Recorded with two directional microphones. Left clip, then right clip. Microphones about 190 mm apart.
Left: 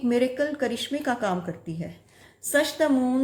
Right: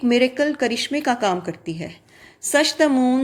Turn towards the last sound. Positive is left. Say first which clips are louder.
# right 6 dB
turn(degrees=-30)  # may be behind; listen again after turning